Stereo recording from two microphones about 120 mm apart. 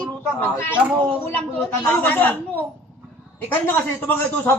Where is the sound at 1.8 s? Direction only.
15° left (ahead or behind).